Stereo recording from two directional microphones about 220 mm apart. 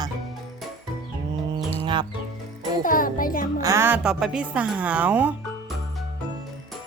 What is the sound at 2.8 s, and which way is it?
Music, 40° left (ahead or behind).